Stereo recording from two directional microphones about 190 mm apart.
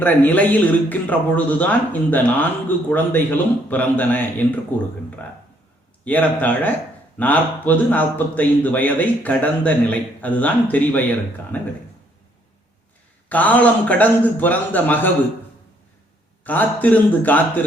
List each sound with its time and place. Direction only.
0.0 s speech: 10° left (ahead or behind)
6.1 s speech: 10° left (ahead or behind)
13.2 s speech: 10° left (ahead or behind)
16.4 s speech: 10° left (ahead or behind)